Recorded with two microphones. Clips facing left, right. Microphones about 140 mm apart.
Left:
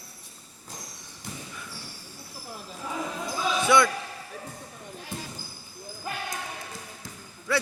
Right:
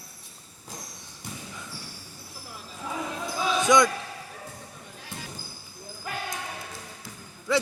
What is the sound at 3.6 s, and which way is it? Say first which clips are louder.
Speech: right 1 dB; 15° right (ahead or behind).